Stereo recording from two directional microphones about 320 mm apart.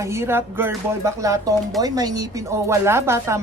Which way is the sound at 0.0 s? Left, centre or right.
Centre.